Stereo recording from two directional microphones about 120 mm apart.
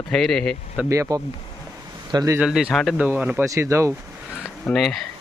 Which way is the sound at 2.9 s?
10° right (ahead or behind).